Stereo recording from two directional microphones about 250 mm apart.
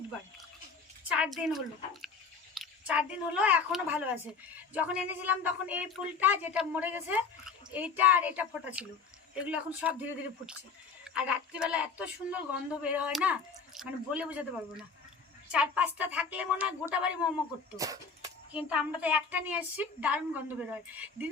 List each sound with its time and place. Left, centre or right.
1.1 s a child's voice: centre
11.0 s a child's voice: centre